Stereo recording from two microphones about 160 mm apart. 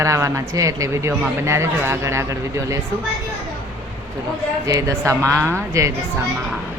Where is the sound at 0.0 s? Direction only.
20° right (ahead or behind).